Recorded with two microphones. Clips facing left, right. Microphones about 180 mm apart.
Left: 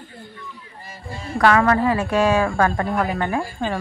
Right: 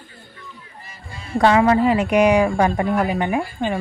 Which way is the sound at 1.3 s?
20° right (ahead or behind).